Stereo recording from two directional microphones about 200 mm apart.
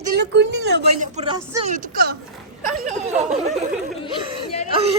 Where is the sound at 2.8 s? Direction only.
35° right (ahead or behind).